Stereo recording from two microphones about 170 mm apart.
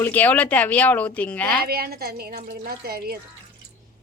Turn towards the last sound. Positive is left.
turn(degrees=-65)  # may be behind; listen again after turning